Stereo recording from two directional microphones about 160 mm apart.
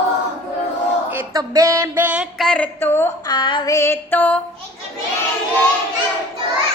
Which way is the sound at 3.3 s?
30° left (ahead or behind).